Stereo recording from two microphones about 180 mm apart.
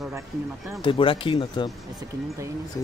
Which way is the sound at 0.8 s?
30° left (ahead or behind).